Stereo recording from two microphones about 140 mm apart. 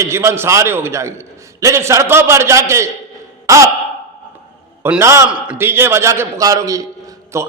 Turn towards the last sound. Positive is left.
turn(degrees=-25)  # may be behind; listen again after turning